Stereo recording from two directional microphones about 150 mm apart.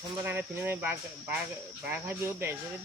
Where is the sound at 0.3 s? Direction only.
15° right (ahead or behind).